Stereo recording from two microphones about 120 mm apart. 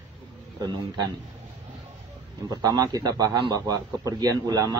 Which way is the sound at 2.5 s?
30° right (ahead or behind).